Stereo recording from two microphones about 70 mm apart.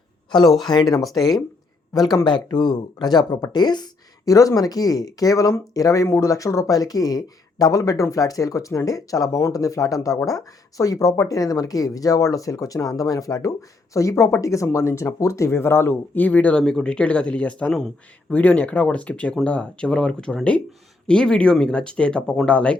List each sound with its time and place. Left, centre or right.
0.4 s speech: centre
0.7 s speech: left
0.9 s speech: left
4.3 s speech: left; by 22.8 s centre